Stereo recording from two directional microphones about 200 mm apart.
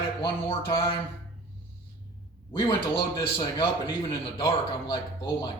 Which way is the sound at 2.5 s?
25° left (ahead or behind).